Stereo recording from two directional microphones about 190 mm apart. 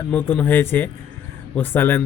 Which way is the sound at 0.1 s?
10° left (ahead or behind).